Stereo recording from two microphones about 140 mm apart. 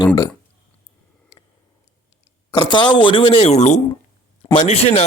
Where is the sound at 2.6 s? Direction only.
35° left (ahead or behind).